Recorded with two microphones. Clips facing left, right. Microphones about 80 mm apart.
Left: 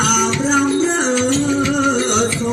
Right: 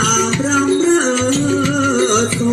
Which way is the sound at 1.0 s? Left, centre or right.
Right.